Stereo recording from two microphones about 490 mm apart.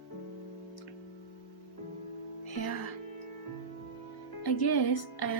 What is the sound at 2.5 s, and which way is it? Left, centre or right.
Music, left.